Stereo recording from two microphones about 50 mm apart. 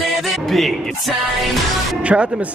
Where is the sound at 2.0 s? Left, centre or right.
Right.